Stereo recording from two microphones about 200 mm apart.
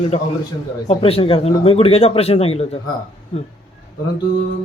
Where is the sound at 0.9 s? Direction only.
30° left (ahead or behind).